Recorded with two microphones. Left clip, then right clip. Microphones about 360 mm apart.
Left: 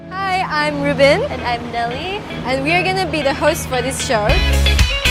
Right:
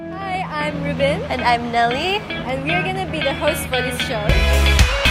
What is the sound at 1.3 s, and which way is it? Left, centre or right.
Speech, right.